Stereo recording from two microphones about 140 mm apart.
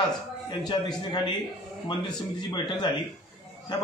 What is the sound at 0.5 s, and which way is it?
A man's voice, 30° left (ahead or behind).